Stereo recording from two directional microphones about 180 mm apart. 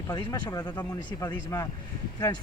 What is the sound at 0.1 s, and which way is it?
Speech, 20° left (ahead or behind).